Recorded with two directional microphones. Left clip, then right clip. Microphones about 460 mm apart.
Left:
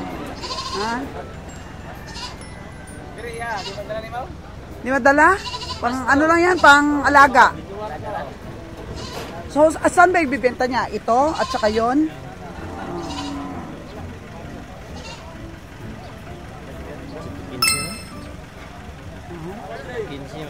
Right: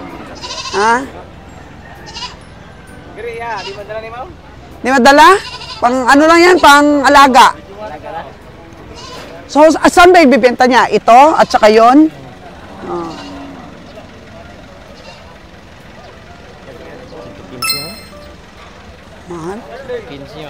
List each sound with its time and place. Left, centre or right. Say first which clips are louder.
0.7 s speech: right 15 dB; right
4.8 s speech: right 9 dB; right
9.5 s speech: right 9 dB; right